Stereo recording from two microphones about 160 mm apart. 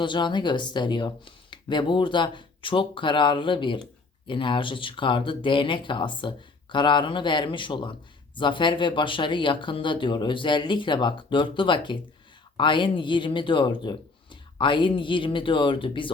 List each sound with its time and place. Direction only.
0.0 s speech: 30° left (ahead or behind)